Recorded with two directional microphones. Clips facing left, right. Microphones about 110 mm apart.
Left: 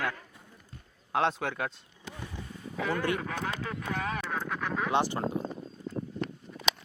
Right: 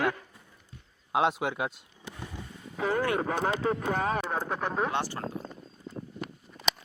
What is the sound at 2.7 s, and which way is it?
Speech, 35° right (ahead or behind).